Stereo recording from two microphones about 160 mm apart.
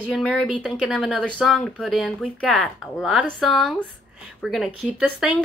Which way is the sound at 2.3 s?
10° left (ahead or behind).